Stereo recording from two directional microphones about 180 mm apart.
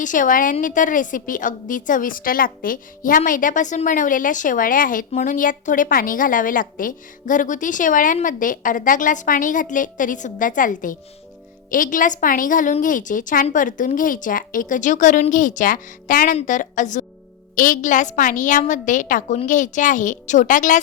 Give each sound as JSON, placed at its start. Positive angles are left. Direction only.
{"t": 0.0, "sound": "a woman's voice", "side_deg": 45}